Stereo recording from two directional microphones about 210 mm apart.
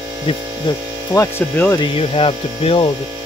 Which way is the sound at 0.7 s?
25° left (ahead or behind).